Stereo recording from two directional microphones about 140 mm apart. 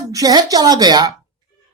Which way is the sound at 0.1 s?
25° right (ahead or behind).